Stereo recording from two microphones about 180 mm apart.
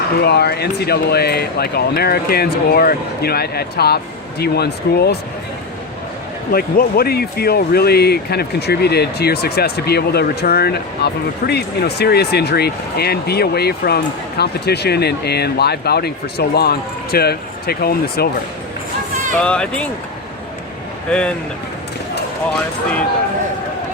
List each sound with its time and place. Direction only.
0.2 s speech: 65° left (ahead or behind)
6.5 s speech: 55° left (ahead or behind)
19.4 s speech: 5° left (ahead or behind)
21.1 s speech: 5° left (ahead or behind)